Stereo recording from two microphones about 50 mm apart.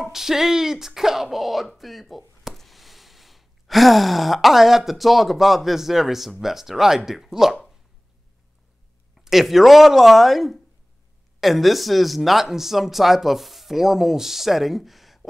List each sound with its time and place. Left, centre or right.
0.0 s speech: centre
9.1 s speech: centre